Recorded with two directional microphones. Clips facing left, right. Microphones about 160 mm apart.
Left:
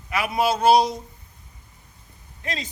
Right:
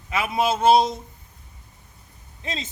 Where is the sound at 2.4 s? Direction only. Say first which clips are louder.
Left 1 dB; 25° right (ahead or behind).